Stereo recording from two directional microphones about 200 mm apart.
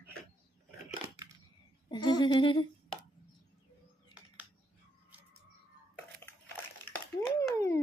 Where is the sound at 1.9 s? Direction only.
20° left (ahead or behind).